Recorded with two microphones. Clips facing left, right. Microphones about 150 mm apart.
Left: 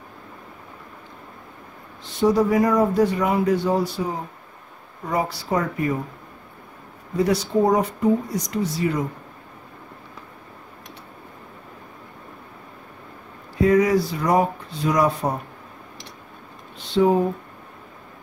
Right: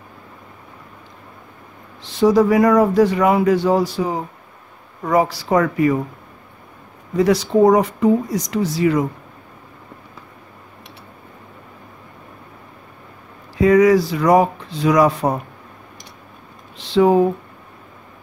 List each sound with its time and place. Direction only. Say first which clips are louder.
2.1 s speech: right 5 dB; 90° right
7.2 s speech: right 5 dB; 90° right
13.6 s speech: right 5 dB; 90° right
16.7 s speech: right 4 dB; 90° right